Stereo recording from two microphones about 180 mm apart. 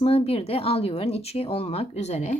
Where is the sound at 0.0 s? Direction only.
35° left (ahead or behind).